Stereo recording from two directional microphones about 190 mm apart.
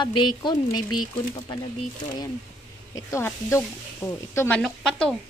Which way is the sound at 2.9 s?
15° left (ahead or behind).